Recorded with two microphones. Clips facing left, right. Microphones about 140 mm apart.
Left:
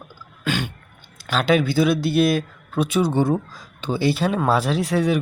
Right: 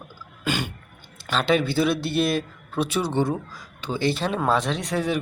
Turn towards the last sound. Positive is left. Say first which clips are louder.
# left 5 dB
turn(degrees=0)  # may be behind; listen again after turning